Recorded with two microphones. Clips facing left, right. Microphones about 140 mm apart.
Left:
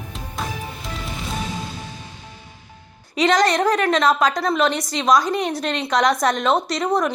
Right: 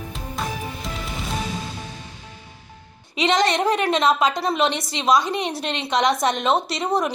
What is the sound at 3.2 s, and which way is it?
A woman's voice, 25° right (ahead or behind).